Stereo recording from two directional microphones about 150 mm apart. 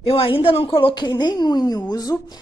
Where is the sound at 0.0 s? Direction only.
40° left (ahead or behind).